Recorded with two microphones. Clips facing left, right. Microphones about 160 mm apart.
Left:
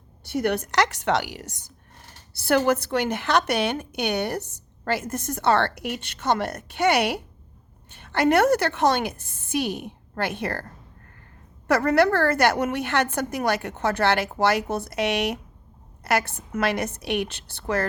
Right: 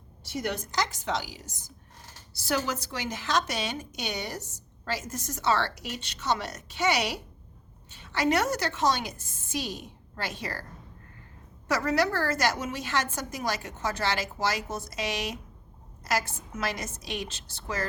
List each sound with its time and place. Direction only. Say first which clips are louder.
0.3 s a woman's voice: left 8 dB; 60° left (ahead or behind)
11.7 s a woman's voice: left 7 dB; 60° left (ahead or behind)